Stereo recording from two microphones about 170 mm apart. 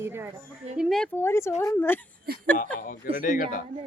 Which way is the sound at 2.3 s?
65° right (ahead or behind).